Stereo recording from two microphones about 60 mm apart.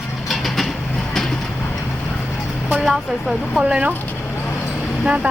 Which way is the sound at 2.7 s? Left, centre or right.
Centre.